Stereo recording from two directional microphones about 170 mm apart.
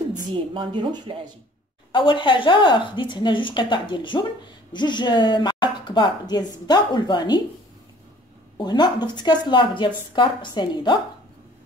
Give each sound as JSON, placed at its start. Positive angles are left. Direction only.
{"t": 0.3, "sound": "speech", "side_deg": -30}
{"t": 1.9, "sound": "a woman's voice", "side_deg": 30}
{"t": 8.5, "sound": "a woman's voice", "side_deg": 25}